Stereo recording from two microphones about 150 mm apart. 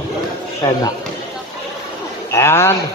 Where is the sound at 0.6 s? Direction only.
25° left (ahead or behind).